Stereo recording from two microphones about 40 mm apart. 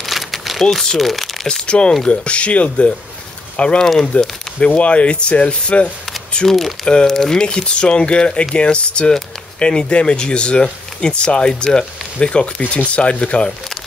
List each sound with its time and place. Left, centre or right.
0.0 s a sound: centre
0.9 s speech: centre
1.5 s speech: left
4.6 s speech: left
6.4 s speech: centre
7.4 s speech: left